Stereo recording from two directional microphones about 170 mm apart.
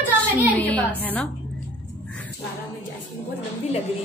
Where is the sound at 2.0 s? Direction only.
5° left (ahead or behind).